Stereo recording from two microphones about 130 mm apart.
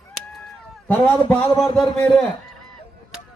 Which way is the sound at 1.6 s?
5° left (ahead or behind).